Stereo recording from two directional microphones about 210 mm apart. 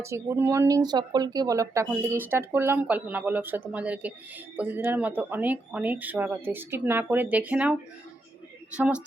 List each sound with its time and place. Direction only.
0.0 s a woman's voice: 15° right (ahead or behind)